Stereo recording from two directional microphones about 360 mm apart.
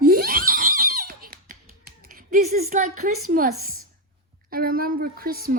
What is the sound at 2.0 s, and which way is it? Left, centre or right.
A woman's voice, right.